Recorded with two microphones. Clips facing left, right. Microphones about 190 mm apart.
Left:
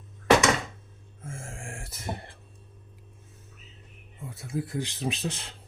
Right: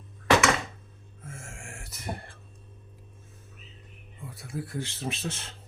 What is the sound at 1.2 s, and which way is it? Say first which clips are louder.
Music: left 4 dB; 30° left (ahead or behind).